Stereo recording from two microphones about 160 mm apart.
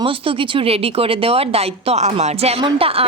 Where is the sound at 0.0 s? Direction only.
35° right (ahead or behind).